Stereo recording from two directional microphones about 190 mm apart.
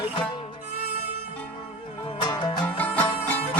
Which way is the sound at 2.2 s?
20° left (ahead or behind).